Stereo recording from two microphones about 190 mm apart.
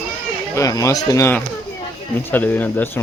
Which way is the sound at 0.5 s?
15° left (ahead or behind).